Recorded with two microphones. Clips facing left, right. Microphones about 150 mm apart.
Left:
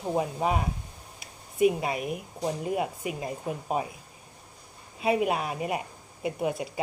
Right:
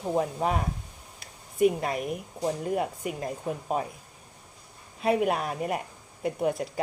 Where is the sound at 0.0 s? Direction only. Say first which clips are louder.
Right 1 dB; 5° left (ahead or behind).